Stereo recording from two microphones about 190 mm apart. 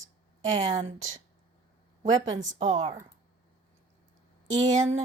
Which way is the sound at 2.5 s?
40° right (ahead or behind).